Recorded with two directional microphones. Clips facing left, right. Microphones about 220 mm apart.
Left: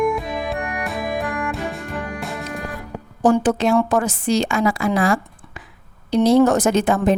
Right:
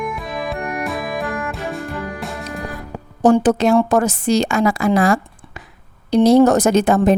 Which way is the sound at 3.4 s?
40° right (ahead or behind).